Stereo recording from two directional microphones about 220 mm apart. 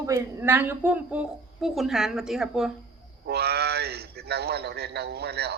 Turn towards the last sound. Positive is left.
turn(degrees=-45)  # may be behind; listen again after turning